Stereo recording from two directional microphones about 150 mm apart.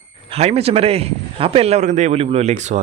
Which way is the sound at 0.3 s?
45° right (ahead or behind).